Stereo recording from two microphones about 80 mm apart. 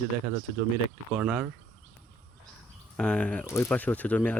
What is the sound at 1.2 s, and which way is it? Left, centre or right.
Speech, centre.